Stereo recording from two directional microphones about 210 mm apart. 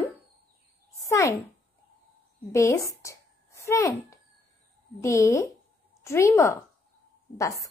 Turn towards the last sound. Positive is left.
turn(degrees=15)  # may be behind; listen again after turning